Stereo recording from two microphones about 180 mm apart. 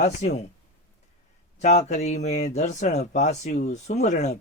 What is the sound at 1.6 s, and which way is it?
Speech, 35° left (ahead or behind).